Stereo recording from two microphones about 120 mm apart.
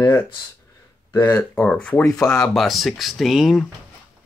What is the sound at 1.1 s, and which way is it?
Speech, 20° left (ahead or behind).